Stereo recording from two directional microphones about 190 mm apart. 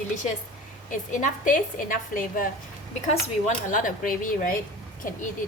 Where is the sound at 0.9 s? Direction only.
45° left (ahead or behind).